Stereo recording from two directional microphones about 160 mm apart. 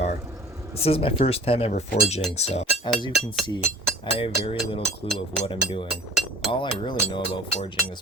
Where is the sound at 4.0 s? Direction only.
35° left (ahead or behind).